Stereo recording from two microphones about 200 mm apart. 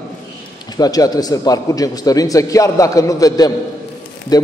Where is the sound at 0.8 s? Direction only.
20° left (ahead or behind).